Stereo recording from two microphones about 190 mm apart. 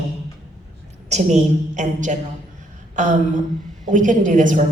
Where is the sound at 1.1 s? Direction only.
40° right (ahead or behind).